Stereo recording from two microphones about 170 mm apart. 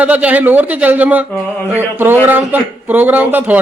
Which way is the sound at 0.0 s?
10° right (ahead or behind).